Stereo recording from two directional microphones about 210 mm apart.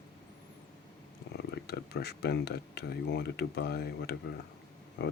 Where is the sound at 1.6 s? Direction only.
50° left (ahead or behind).